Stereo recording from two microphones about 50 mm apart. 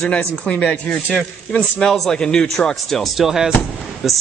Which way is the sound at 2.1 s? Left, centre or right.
Centre.